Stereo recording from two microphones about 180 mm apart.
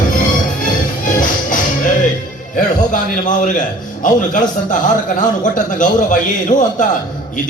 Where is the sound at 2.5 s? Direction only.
45° left (ahead or behind).